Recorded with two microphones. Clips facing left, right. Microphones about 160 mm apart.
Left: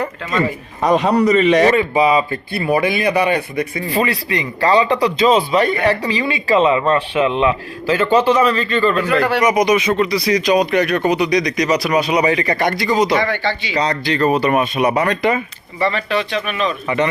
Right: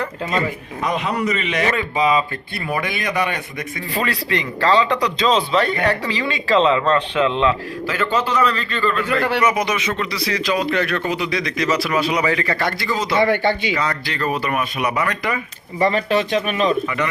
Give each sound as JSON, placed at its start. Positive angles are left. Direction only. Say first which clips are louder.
{"t": 0.8, "sound": "a man's voice", "louder": "left 8 dB", "side_deg": 35}
{"t": 1.7, "sound": "speech", "louder": "left 4 dB", "side_deg": 10}
{"t": 15.8, "sound": "speech", "louder": "right 1 dB", "side_deg": -40}